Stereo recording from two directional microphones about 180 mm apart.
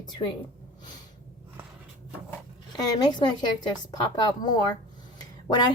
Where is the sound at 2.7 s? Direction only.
25° left (ahead or behind).